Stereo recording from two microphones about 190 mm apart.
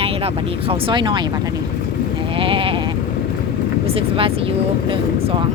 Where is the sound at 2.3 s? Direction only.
30° right (ahead or behind).